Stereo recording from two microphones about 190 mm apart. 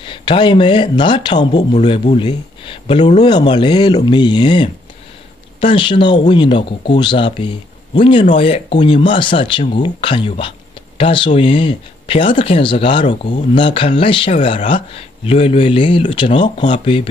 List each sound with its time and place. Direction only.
0.0 s speech: 25° left (ahead or behind)